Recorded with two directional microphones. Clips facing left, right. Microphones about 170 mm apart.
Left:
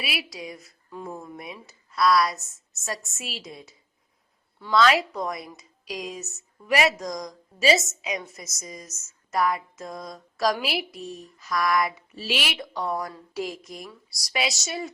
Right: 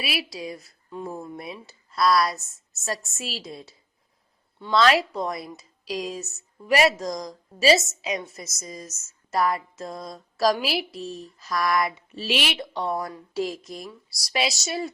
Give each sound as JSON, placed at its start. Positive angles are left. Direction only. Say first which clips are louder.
{"t": 0.0, "sound": "speech", "louder": "right 3 dB", "side_deg": -30}